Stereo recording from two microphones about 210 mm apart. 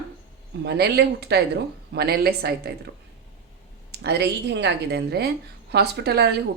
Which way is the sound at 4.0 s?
55° right (ahead or behind).